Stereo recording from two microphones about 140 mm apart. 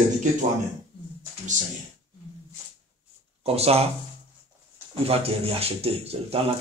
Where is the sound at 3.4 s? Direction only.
45° right (ahead or behind).